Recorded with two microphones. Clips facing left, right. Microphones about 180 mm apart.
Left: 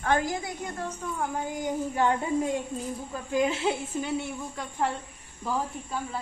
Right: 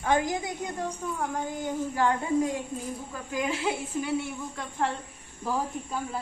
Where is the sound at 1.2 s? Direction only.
10° left (ahead or behind).